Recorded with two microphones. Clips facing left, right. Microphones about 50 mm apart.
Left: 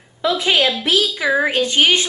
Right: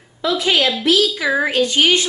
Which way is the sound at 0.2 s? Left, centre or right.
Left.